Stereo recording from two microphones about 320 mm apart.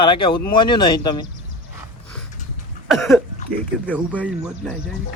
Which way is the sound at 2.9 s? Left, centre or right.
Centre.